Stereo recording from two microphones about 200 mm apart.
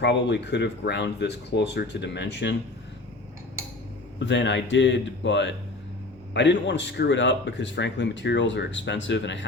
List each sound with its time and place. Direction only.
0.0 s speech: 60° left (ahead or behind)
4.3 s speech: 65° left (ahead or behind)